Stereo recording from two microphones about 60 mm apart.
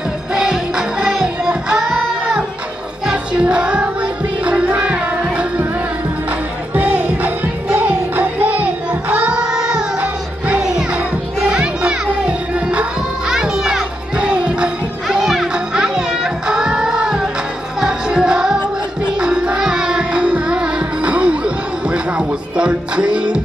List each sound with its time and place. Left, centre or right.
0.3 s music: centre
6.7 s music: right
9.1 s child singing: right
9.4 s music: centre
15.0 s children playing: centre
15.5 s music: centre